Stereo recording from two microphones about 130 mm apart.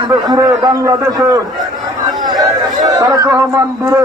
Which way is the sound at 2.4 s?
30° right (ahead or behind).